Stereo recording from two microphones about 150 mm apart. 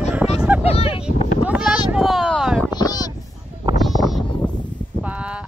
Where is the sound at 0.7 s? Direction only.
40° left (ahead or behind).